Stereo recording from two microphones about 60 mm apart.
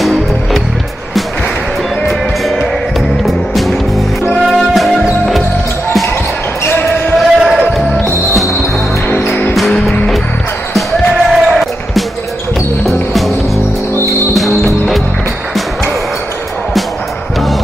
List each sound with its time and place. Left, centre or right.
0.0 s music: centre
2.0 s music: centre
6.6 s basketball bounce: left
7.2 s basketball bounce: centre
9.5 s music: centre
11.1 s basketball bounce: centre
12.8 s music: centre
14.3 s music: centre